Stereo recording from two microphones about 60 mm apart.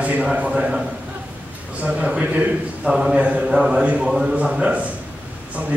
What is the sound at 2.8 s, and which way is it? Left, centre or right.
A man's voice, centre.